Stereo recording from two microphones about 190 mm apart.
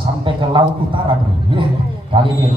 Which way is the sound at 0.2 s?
25° right (ahead or behind).